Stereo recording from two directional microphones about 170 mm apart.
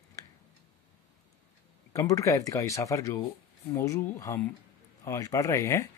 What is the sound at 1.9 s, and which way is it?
Speech, 20° left (ahead or behind).